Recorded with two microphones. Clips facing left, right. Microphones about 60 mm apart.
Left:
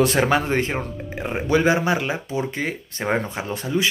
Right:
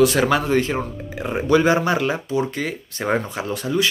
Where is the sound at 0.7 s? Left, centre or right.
Centre.